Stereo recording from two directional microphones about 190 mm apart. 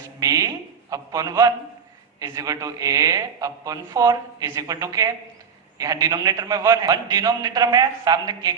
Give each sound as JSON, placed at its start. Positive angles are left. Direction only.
{"t": 0.2, "sound": "a man's voice", "side_deg": -20}